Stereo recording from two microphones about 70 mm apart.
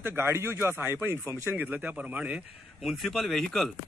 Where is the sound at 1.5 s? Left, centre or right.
Right.